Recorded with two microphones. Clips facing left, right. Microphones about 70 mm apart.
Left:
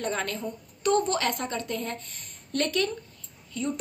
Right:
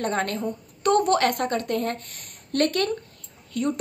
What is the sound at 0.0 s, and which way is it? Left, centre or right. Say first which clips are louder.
A woman's voice: right 5 dB; right.